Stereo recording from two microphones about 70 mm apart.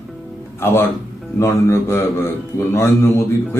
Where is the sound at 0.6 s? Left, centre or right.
Left.